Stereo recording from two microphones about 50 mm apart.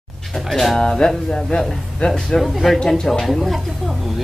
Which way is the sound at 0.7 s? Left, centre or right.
Centre.